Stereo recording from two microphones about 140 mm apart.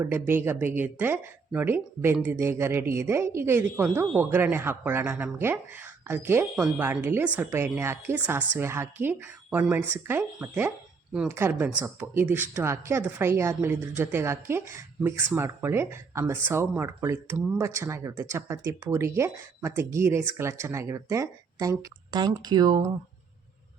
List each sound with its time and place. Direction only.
0.0 s speech: 15° right (ahead or behind)